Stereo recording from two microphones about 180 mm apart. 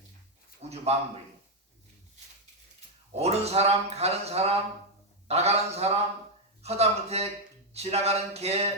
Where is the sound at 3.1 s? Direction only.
35° right (ahead or behind).